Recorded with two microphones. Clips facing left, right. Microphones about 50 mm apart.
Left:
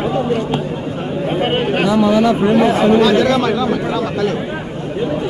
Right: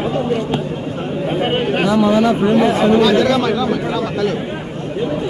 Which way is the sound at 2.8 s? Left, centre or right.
Centre.